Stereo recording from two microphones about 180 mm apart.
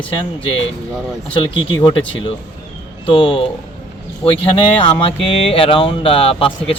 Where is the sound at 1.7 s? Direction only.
25° left (ahead or behind).